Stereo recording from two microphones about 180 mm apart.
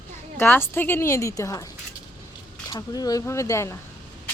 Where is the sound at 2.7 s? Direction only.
20° left (ahead or behind).